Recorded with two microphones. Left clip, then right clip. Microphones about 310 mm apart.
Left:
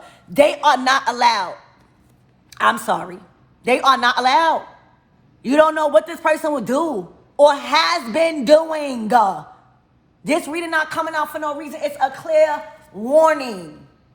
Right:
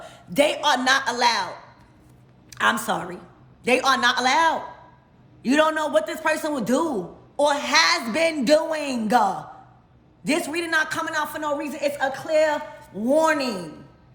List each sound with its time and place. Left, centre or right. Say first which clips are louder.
0.0 s a man's voice: left 6 dB; centre
2.5 s a man's voice: left 4 dB; centre